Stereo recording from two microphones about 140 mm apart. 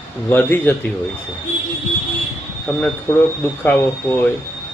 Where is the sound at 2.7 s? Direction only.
15° left (ahead or behind).